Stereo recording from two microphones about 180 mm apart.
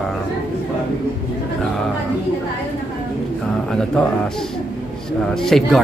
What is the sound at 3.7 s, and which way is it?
Speech, 5° left (ahead or behind).